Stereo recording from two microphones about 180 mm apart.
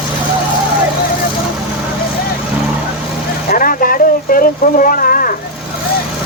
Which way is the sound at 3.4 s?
50° left (ahead or behind).